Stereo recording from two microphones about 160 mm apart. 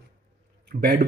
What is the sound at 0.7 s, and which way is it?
Speech, 70° right (ahead or behind).